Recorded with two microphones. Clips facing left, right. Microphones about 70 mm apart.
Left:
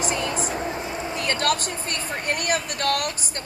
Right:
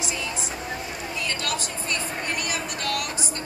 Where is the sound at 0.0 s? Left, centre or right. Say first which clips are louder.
Left 6 dB; left.